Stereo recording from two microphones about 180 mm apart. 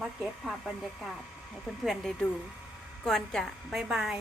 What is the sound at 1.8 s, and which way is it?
A woman's voice, centre (ahead or behind).